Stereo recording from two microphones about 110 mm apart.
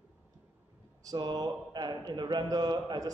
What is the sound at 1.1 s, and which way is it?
A man's voice, 40° right (ahead or behind).